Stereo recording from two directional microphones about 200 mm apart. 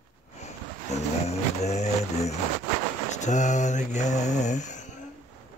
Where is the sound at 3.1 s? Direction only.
35° left (ahead or behind).